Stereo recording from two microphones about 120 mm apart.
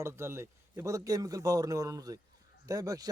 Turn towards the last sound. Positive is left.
turn(degrees=-30)  # may be behind; listen again after turning